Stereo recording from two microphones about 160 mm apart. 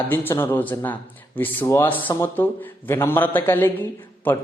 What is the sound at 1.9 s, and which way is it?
Speech, 30° left (ahead or behind).